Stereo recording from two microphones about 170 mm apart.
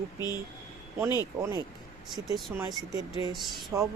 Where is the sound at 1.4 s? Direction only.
15° right (ahead or behind); by 3.7 s centre (ahead or behind).